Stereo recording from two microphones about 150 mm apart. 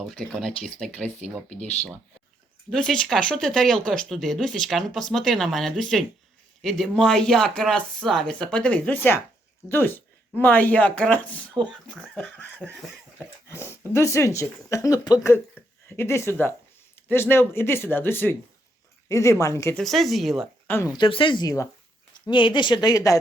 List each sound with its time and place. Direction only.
0.0 s speech: centre (ahead or behind)
2.6 s speech: 5° left (ahead or behind)
13.5 s speech: 15° left (ahead or behind)
15.6 s a sound: 10° left (ahead or behind)
15.9 s speech: 15° left (ahead or behind)
19.7 s speech: centre (ahead or behind)
20.7 s speech: 15° left (ahead or behind)
21.0 s speech: 35° left (ahead or behind)
22.3 s speech: 30° left (ahead or behind)